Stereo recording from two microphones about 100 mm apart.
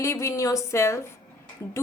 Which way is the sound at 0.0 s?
30° left (ahead or behind).